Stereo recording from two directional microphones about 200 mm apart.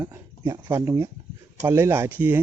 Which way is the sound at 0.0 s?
20° right (ahead or behind).